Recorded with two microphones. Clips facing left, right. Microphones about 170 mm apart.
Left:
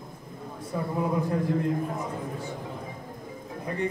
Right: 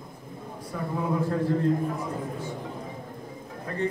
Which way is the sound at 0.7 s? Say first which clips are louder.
Left 2 dB; 20° left (ahead or behind).